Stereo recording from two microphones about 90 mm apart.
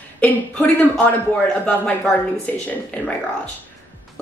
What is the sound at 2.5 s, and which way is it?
Speech, 20° left (ahead or behind).